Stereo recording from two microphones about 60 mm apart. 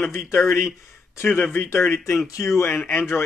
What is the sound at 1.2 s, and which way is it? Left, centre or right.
Speech, left.